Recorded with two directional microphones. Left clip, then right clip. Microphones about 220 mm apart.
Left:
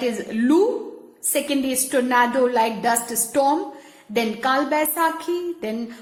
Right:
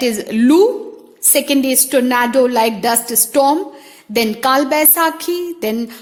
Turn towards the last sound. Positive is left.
turn(degrees=-45)  # may be behind; listen again after turning